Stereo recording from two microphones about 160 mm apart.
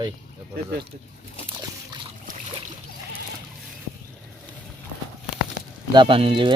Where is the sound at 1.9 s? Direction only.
25° right (ahead or behind).